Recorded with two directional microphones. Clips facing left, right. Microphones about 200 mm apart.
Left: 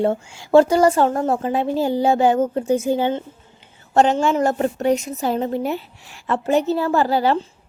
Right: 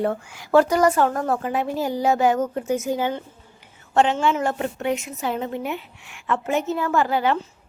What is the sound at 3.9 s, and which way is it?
A woman's voice, 40° left (ahead or behind).